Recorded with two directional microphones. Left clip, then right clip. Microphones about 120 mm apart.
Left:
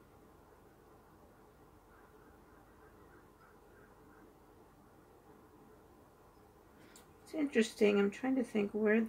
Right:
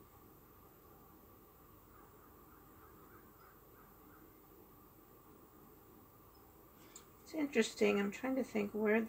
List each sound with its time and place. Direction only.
7.2 s speech: 55° left (ahead or behind)